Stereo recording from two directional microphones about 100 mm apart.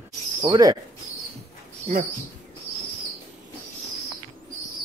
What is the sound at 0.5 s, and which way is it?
Speech, 40° right (ahead or behind).